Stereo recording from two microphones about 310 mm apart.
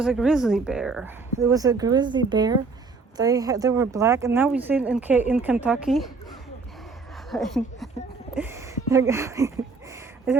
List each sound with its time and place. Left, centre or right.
0.0 s a woman's voice: centre
7.3 s speech: centre